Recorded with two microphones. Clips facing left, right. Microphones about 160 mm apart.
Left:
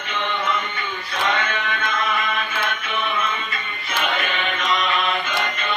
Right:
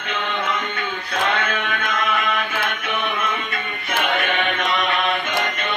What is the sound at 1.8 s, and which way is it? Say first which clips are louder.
Chant: even; 60° right (ahead or behind).